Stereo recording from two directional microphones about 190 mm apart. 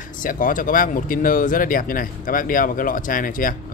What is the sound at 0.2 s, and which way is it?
Speech, 45° left (ahead or behind).